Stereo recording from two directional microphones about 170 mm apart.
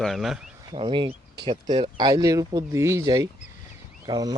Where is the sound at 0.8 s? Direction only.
30° right (ahead or behind).